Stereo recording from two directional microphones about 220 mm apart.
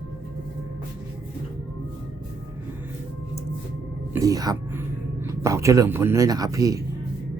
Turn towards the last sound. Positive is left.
turn(degrees=-15)  # may be behind; listen again after turning